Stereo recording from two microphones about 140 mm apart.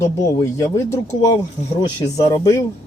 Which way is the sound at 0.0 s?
20° left (ahead or behind).